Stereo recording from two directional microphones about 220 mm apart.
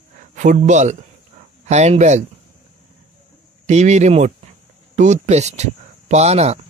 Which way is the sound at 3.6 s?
30° right (ahead or behind).